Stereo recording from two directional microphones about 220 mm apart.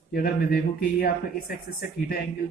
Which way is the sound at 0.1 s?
45° left (ahead or behind).